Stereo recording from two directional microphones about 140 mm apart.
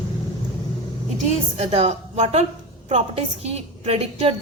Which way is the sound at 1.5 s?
50° right (ahead or behind).